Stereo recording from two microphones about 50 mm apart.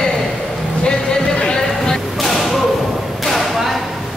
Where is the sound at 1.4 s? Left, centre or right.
Centre.